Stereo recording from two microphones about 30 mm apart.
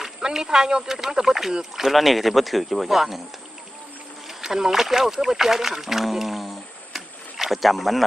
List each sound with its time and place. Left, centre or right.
0.2 s speech: right
2.0 s speech: centre
4.3 s speech: centre